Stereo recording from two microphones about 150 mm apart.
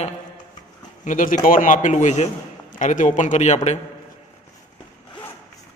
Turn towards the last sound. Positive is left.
turn(degrees=50)  # may be behind; listen again after turning